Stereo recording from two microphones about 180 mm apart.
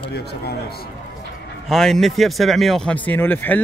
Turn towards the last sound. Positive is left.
turn(degrees=10)  # may be behind; listen again after turning